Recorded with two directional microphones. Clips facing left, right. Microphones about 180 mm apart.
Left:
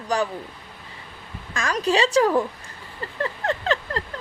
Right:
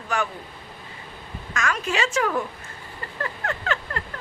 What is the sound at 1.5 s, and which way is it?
Speech, 35° left (ahead or behind).